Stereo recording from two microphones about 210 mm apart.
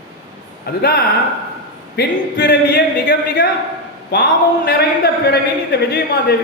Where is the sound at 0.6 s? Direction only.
50° left (ahead or behind).